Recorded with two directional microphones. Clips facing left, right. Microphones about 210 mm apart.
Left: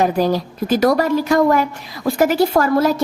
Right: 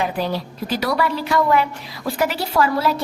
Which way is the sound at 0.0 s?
45° left (ahead or behind).